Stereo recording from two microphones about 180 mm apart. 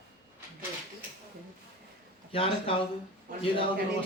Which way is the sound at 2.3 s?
30° left (ahead or behind).